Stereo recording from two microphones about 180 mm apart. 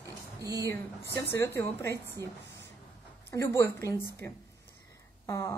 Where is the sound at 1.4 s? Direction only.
15° left (ahead or behind).